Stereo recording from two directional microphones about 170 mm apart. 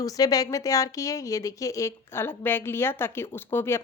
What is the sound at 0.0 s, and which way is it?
Speech, 20° left (ahead or behind).